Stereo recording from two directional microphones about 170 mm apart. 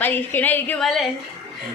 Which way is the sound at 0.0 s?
10° left (ahead or behind).